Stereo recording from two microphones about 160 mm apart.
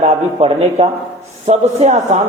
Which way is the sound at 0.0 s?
40° right (ahead or behind).